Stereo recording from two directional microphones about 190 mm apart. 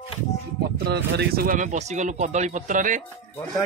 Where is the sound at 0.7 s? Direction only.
60° right (ahead or behind); by 3.0 s 40° right (ahead or behind).